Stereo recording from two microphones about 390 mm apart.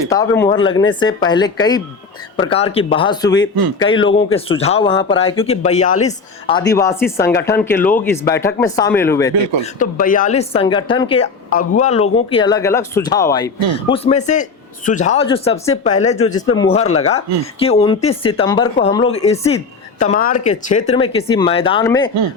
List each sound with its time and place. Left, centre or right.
0.1 s a woman's voice: centre
9.7 s a woman's voice: centre